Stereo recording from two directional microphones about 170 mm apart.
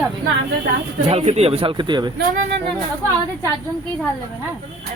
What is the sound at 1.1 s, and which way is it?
A man's voice, 40° right (ahead or behind).